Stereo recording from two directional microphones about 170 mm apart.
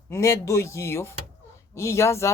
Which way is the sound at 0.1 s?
20° left (ahead or behind).